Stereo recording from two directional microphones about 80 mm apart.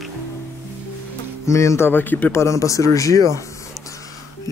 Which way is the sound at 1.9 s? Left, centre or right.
Left.